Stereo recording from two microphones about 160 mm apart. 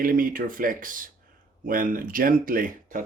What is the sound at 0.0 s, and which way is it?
Speech, 60° right (ahead or behind).